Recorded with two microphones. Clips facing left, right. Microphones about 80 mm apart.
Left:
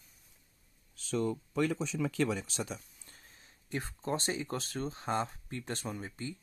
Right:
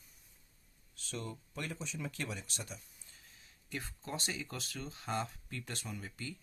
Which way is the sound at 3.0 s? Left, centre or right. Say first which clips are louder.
Left 3 dB; left.